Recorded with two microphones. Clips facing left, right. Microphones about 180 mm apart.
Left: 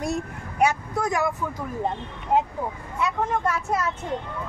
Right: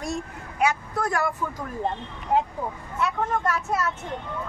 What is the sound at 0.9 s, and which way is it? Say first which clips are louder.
Speech: left 1 dB; 15° left (ahead or behind).